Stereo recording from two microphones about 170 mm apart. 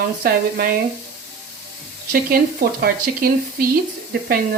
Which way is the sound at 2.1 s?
60° right (ahead or behind).